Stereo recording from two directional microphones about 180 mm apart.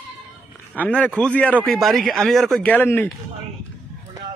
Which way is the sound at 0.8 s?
10° left (ahead or behind).